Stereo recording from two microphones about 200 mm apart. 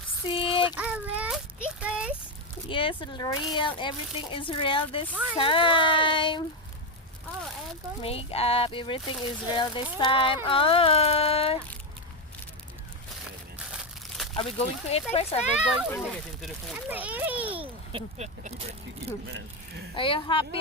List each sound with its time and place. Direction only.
0.3 s a sound: 25° left (ahead or behind)
0.8 s child singing: 5° right (ahead or behind)
2.6 s speech: 25° left (ahead or behind)
8.0 s speech: 30° left (ahead or behind)
14.3 s speech: 30° left (ahead or behind)
16.9 s a child's voice: 10° right (ahead or behind)
17.4 s a sound: 25° right (ahead or behind)
20.0 s speech: 25° left (ahead or behind)